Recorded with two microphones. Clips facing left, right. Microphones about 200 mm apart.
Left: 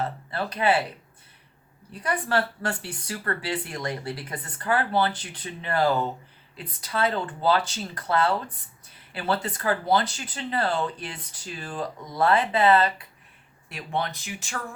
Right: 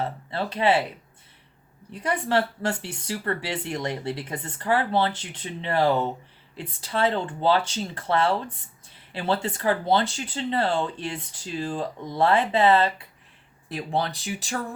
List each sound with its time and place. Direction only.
0.0 s speech: 25° right (ahead or behind)
1.9 s speech: 25° right (ahead or behind)